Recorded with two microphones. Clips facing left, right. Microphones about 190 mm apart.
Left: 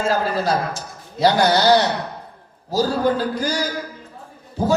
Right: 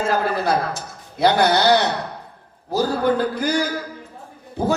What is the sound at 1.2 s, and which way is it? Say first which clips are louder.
Speech: even; 60° right (ahead or behind).